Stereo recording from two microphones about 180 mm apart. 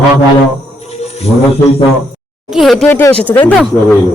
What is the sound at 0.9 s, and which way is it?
Music, 35° left (ahead or behind).